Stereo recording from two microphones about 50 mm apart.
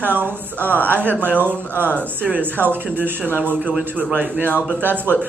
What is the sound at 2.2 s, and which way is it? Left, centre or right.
Speech, right.